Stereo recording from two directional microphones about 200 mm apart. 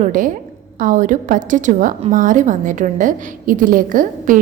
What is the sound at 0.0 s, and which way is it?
A woman's voice, 40° right (ahead or behind).